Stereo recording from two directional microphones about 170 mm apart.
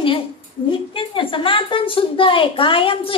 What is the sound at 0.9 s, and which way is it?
A woman's voice, 30° left (ahead or behind).